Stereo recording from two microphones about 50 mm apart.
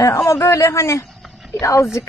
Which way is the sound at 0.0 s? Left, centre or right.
Left.